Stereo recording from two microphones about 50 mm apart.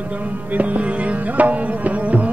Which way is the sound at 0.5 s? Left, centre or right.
Right.